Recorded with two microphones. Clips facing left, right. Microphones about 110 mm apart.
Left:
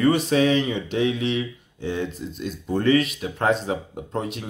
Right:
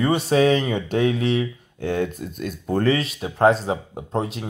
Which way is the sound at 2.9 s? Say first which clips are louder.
Left 3 dB; 30° right (ahead or behind).